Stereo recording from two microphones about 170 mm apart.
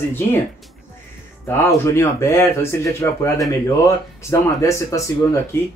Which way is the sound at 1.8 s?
15° left (ahead or behind).